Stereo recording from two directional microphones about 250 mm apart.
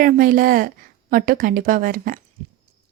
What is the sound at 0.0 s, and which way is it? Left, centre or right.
A woman's voice, right.